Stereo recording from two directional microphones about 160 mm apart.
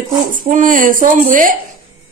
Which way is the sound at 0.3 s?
55° right (ahead or behind).